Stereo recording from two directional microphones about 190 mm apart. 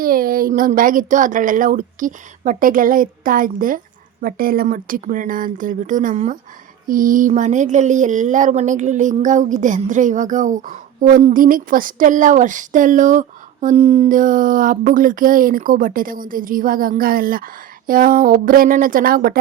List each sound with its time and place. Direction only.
0.0 s speech: 50° right (ahead or behind)